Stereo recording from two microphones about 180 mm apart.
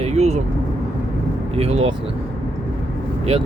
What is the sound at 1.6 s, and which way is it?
Speech, 35° right (ahead or behind).